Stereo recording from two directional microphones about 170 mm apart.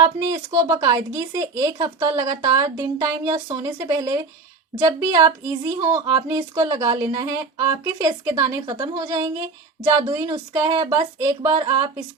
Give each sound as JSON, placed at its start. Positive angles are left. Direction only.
{"t": 0.0, "sound": "speech", "side_deg": -20}